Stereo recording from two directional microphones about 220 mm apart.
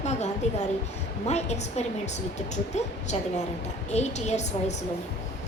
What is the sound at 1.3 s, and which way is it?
Speech, 30° left (ahead or behind).